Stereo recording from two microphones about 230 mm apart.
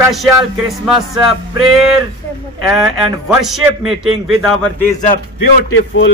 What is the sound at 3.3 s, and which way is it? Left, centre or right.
A man's voice, centre.